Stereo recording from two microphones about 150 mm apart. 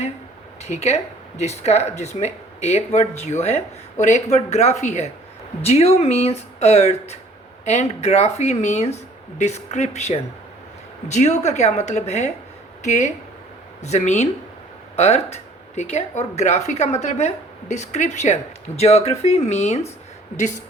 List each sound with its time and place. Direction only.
0.6 s speech: 45° left (ahead or behind)